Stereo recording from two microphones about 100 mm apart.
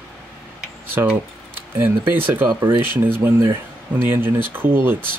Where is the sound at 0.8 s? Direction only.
20° right (ahead or behind).